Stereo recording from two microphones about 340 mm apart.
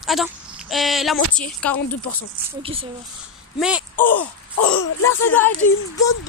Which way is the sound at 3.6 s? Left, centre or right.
Centre.